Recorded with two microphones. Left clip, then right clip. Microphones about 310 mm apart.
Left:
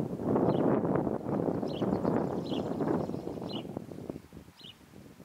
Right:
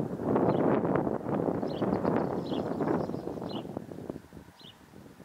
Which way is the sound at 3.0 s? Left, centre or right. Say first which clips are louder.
Right 2 dB; left.